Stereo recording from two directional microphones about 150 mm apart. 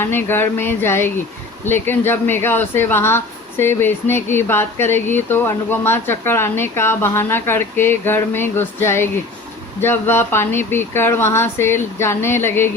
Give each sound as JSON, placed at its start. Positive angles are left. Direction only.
{"t": 0.0, "sound": "speech", "side_deg": 15}